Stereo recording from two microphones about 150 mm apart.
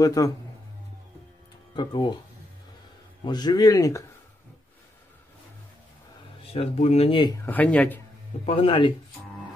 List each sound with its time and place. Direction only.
0.0 s speech: 25° left (ahead or behind)
1.8 s speech: 30° left (ahead or behind)
3.3 s speech: 30° left (ahead or behind)
6.5 s speech: 45° left (ahead or behind)
7.1 s speech: 30° left (ahead or behind)
7.4 s speech: 10° left (ahead or behind)
8.5 s speech: 40° left (ahead or behind)